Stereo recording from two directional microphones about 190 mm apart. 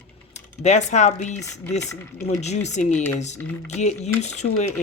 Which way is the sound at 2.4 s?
35° left (ahead or behind).